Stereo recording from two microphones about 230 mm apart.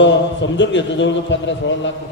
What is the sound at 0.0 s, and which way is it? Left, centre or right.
A man's voice, left.